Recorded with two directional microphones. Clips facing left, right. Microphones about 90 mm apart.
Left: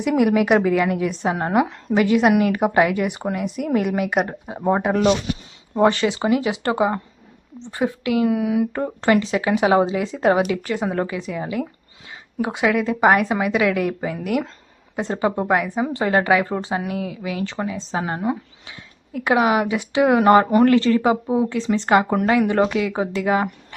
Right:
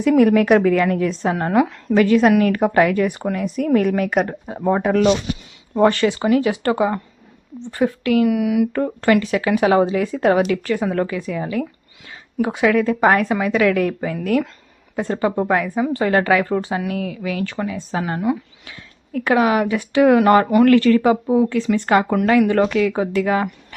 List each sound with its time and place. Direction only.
0.0 s a woman's voice: 15° left (ahead or behind)